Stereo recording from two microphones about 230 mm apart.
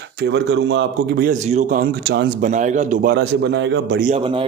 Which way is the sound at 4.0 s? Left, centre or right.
Right.